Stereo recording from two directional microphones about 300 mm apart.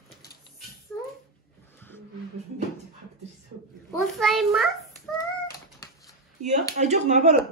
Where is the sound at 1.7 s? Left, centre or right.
Centre.